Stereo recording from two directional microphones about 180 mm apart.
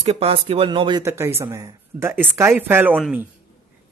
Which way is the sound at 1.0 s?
15° right (ahead or behind).